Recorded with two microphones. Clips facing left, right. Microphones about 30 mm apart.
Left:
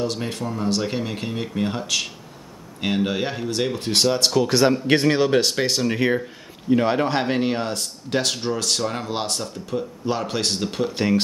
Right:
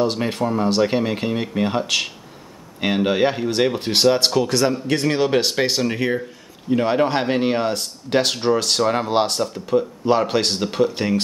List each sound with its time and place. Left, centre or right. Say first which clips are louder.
0.0 s speech: right 5 dB; right
4.5 s speech: left 1 dB; centre
5.2 s speech: right 1 dB; centre
5.9 s speech: left 1 dB; centre
6.7 s speech: right 1 dB; centre